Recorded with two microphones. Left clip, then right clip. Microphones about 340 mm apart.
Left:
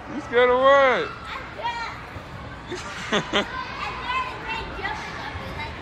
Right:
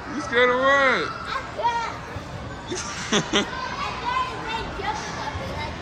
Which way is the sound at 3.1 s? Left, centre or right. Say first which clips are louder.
Right 1 dB; centre.